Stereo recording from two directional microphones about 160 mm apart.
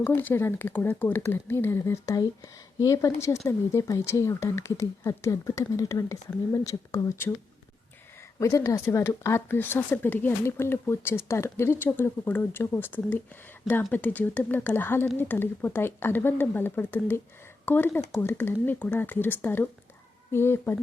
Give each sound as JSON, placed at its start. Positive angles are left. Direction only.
{"t": 0.0, "sound": "speech", "side_deg": 10}
{"t": 8.4, "sound": "speech", "side_deg": 20}